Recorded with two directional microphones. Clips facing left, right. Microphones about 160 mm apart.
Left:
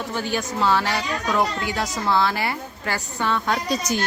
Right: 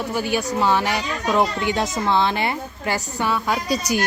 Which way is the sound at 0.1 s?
10° right (ahead or behind).